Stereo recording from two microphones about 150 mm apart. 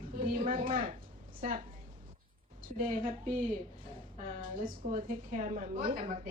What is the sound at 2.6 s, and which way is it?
Speech, 70° right (ahead or behind).